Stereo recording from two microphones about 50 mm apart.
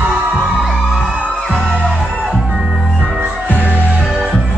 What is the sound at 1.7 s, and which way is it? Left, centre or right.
Music, centre.